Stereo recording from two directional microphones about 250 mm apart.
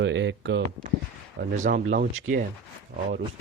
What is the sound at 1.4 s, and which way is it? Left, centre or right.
Speech, right.